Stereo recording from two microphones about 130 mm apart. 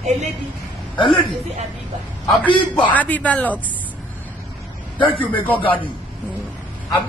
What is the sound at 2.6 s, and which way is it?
Speech, 10° left (ahead or behind).